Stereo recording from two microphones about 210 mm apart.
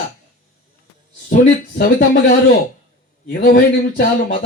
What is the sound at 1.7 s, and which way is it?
Speech, 45° left (ahead or behind).